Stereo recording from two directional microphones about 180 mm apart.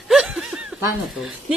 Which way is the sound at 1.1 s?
Centre (ahead or behind).